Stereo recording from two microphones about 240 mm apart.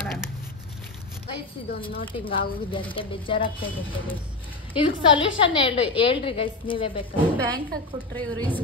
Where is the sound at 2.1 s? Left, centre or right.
Left.